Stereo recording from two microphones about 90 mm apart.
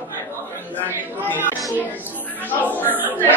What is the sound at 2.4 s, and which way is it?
Speech, 20° left (ahead or behind).